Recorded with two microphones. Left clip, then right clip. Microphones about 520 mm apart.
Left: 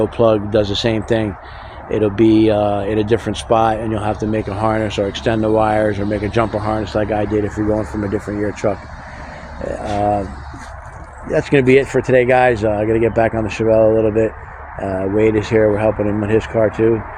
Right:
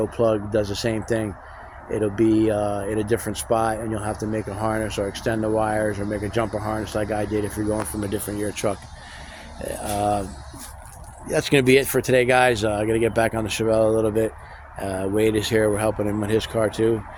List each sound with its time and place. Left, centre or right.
0.0 s speech: right
10.0 s speech: right
11.3 s speech: right